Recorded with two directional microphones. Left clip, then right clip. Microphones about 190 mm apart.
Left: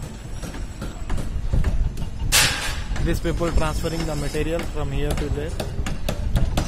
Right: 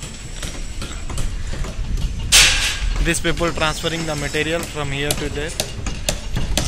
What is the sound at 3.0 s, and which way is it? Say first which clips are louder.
Speech: right 5 dB; 5° right (ahead or behind).